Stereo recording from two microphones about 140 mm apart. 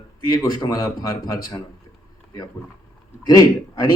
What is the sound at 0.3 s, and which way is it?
Speech, 25° left (ahead or behind).